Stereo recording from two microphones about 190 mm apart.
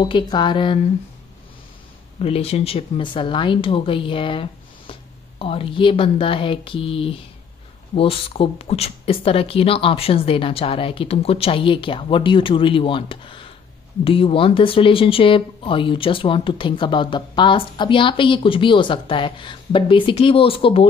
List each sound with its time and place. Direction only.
0.0 s speech: 25° left (ahead or behind)
2.1 s speech: 30° left (ahead or behind)